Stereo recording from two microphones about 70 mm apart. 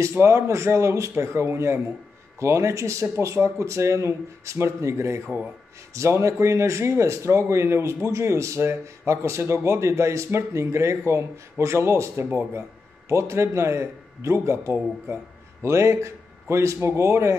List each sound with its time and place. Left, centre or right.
0.1 s speech: right